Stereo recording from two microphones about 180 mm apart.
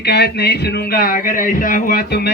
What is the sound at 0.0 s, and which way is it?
Speech, 65° left (ahead or behind).